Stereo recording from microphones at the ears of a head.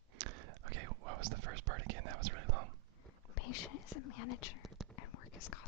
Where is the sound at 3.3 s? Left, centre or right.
Left.